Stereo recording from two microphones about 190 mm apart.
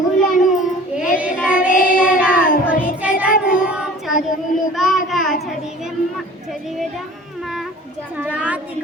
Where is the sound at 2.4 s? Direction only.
45° left (ahead or behind).